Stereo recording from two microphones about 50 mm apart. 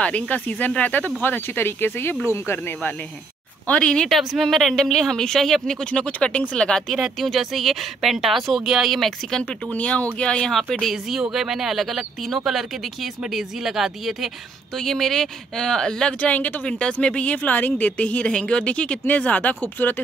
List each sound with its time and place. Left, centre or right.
0.0 s speech: left
1.2 s speech: left
2.2 s speech: left
2.5 s speech: left
3.8 s speech: centre
4.1 s speech: centre
7.0 s speech: centre
9.8 s speech: left
10.5 s speech: centre
10.9 s speech: centre
14.8 s speech: centre
16.2 s speech: left
16.6 s speech: left